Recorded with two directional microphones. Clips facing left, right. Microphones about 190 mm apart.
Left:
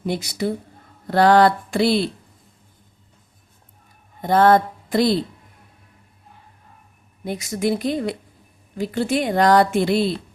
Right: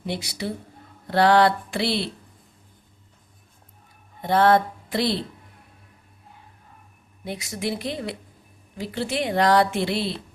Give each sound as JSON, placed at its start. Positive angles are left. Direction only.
{"t": 0.0, "sound": "speech", "side_deg": 45}
{"t": 4.2, "sound": "speech", "side_deg": 45}
{"t": 7.3, "sound": "speech", "side_deg": 45}